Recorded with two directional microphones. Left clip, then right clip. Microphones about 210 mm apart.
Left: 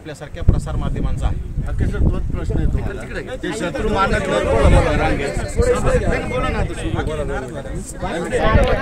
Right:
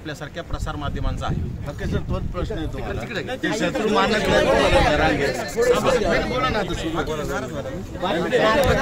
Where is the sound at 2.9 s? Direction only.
5° right (ahead or behind).